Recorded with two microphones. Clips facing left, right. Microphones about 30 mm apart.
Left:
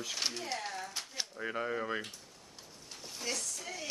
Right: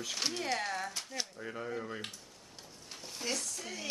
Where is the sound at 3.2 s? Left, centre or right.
Centre.